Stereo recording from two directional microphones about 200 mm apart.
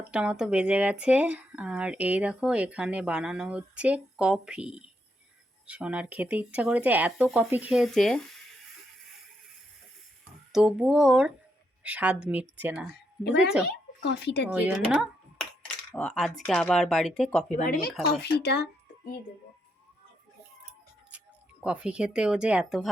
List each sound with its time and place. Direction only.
0.1 s speech: 5° right (ahead or behind)
10.5 s speech: 5° right (ahead or behind)
12.9 s speech: 55° left (ahead or behind)
14.5 s computer keyboard: 5° right (ahead or behind)
16.5 s speech: 5° left (ahead or behind)
17.6 s speech: 45° left (ahead or behind)
21.6 s speech: 5° right (ahead or behind)